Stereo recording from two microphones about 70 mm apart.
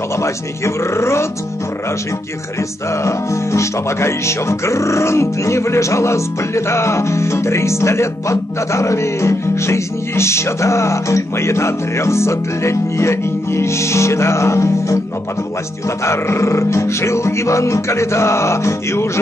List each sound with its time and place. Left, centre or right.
0.2 s speech: left
3.0 s speech: left
16.0 s speech: left